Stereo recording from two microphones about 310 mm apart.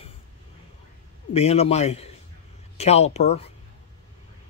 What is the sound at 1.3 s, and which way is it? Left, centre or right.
Speech, centre.